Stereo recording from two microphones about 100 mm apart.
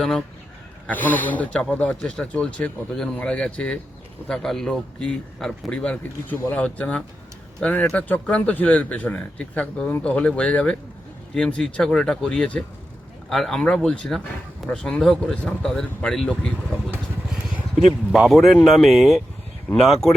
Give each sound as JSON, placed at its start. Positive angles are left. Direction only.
{"t": 0.0, "sound": "speech", "side_deg": 5}
{"t": 0.9, "sound": "speech", "side_deg": 15}
{"t": 17.7, "sound": "speech", "side_deg": 0}